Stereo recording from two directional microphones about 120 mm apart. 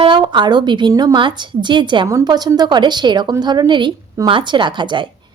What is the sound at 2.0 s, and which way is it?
Speech, 30° right (ahead or behind).